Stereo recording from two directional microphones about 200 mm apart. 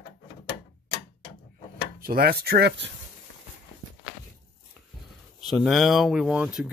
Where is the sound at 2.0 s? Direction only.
50° right (ahead or behind).